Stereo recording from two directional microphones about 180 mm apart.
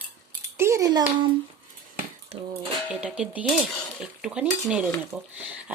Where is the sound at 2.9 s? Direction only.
5° right (ahead or behind).